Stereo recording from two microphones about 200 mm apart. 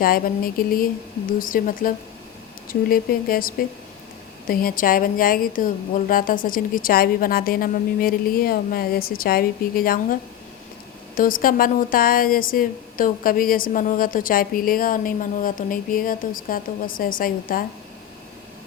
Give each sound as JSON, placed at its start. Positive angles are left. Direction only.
{"t": 0.0, "sound": "a woman's voice", "side_deg": 45}